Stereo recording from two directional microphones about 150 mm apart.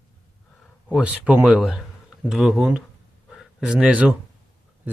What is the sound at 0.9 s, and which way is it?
Speech, 10° right (ahead or behind).